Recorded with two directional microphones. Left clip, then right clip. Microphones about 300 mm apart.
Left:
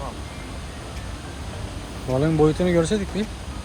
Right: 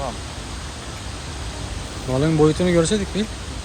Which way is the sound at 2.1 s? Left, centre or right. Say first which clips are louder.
Right 2 dB; centre.